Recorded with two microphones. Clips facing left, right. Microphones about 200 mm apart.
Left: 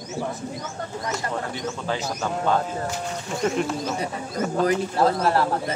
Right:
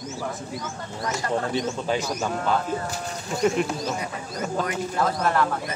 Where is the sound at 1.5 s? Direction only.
15° right (ahead or behind).